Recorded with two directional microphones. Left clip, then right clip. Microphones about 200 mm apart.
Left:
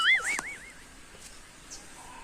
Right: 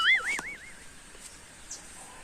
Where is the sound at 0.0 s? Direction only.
Centre (ahead or behind).